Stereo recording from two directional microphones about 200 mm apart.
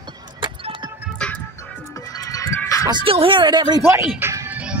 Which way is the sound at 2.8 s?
25° right (ahead or behind).